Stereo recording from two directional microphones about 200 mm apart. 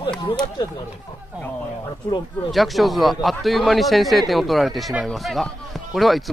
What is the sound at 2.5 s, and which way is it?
A man's voice, centre (ahead or behind).